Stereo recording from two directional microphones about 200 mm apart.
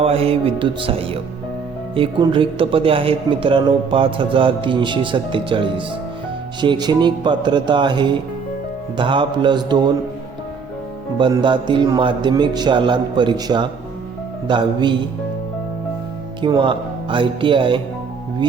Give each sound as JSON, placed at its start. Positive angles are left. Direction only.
{"t": 0.0, "sound": "speech", "side_deg": -30}
{"t": 11.2, "sound": "speech", "side_deg": -25}
{"t": 16.4, "sound": "speech", "side_deg": -25}